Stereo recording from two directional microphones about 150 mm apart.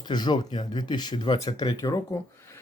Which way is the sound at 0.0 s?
30° left (ahead or behind).